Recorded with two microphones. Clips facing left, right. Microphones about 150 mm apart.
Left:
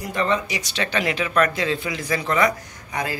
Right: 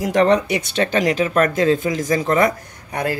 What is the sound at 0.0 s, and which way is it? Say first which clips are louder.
Speech: right 8 dB; 75° right (ahead or behind).